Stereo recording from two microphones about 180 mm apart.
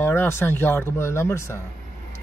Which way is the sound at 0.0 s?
15° left (ahead or behind).